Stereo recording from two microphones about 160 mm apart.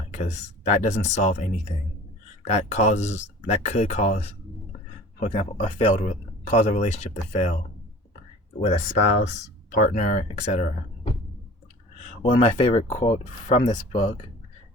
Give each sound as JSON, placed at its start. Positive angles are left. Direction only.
{"t": 0.1, "sound": "speech", "side_deg": 50}
{"t": 5.2, "sound": "speech", "side_deg": 40}
{"t": 6.5, "sound": "speech", "side_deg": 45}
{"t": 8.6, "sound": "speech", "side_deg": 50}
{"t": 12.3, "sound": "speech", "side_deg": 35}